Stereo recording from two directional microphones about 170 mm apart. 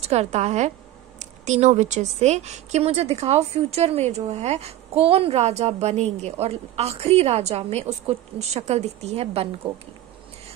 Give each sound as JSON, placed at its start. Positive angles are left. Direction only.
{"t": 0.0, "sound": "speech", "side_deg": -40}